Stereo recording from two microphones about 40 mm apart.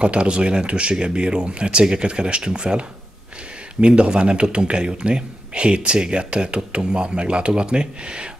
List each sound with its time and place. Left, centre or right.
0.0 s speech: right